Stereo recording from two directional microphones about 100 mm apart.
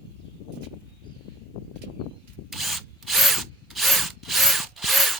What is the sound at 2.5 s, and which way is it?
Drill, centre (ahead or behind).